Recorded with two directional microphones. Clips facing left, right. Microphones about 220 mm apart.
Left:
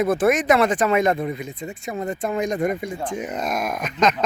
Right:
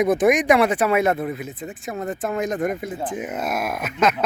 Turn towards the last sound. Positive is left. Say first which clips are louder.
# even
turn(degrees=-5)  # may be behind; listen again after turning